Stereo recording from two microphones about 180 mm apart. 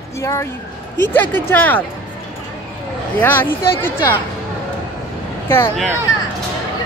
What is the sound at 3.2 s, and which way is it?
Speech, 10° left (ahead or behind).